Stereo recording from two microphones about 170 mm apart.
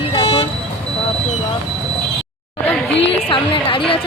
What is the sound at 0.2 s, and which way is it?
Toot, 35° left (ahead or behind).